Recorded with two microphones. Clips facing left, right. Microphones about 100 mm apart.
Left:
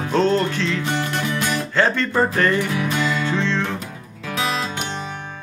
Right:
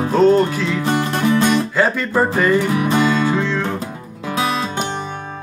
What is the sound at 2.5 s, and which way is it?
Music, 30° right (ahead or behind).